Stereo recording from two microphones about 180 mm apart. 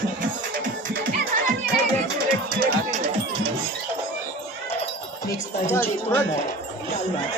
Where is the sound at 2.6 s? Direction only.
55° right (ahead or behind).